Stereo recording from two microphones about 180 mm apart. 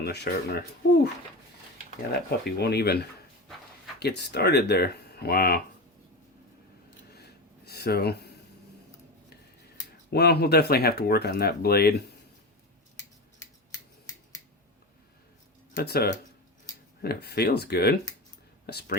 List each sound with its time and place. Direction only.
0.0 s speech: 65° left (ahead or behind)
2.0 s speech: 60° left (ahead or behind)
7.1 s a sound: 60° left (ahead or behind)
10.1 s speech: 60° left (ahead or behind)
15.7 s speech: 60° left (ahead or behind)